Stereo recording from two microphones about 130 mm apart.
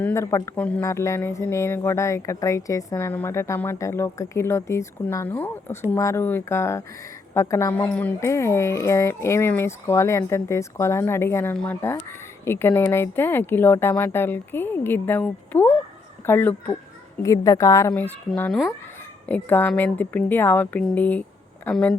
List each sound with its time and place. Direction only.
0.0 s speech: 20° left (ahead or behind)
0.5 s speech: 10° left (ahead or behind)
0.8 s speech: 20° left (ahead or behind)
19.3 s speech: 15° left (ahead or behind)